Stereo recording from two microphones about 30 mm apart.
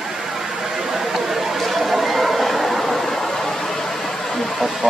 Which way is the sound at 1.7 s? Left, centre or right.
Centre.